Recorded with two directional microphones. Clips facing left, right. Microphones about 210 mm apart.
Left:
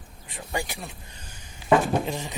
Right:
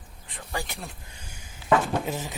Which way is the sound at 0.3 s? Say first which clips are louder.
Left 3 dB; 15° left (ahead or behind).